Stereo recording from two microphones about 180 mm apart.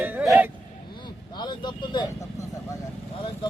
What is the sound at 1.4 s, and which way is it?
Vehicle, 25° left (ahead or behind).